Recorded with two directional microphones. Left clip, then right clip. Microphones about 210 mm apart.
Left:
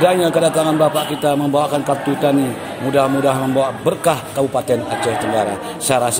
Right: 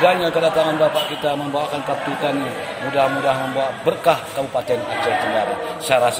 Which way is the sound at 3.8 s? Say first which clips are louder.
Even; 50° left (ahead or behind).